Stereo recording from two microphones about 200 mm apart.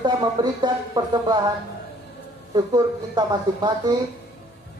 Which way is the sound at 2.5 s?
20° right (ahead or behind).